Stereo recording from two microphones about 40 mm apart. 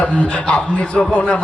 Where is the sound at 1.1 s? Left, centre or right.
Left.